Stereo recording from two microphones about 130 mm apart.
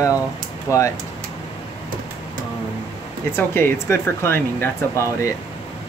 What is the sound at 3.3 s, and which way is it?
Speech, 15° left (ahead or behind).